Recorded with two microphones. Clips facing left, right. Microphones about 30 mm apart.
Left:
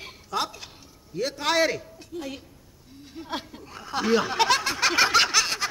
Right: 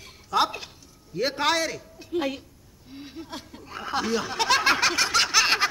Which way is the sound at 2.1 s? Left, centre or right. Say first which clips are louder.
Right 8 dB; right.